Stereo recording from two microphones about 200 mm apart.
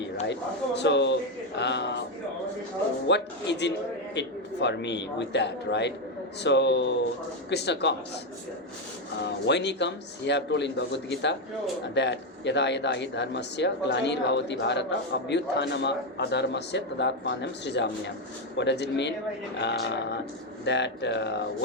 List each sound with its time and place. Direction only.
0.8 s speech: 60° left (ahead or behind)
3.1 s speech: 60° left (ahead or behind)
9.1 s speech: 60° left (ahead or behind)